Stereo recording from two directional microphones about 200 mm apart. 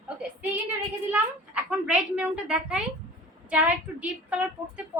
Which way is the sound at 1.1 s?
5° right (ahead or behind).